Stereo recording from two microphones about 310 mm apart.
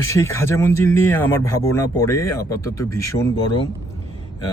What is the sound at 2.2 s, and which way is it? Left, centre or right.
Speech, left.